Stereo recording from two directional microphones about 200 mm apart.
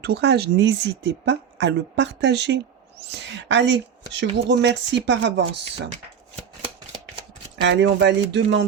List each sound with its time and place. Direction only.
0.0 s speech: 55° right (ahead or behind)
7.6 s speech: 65° right (ahead or behind)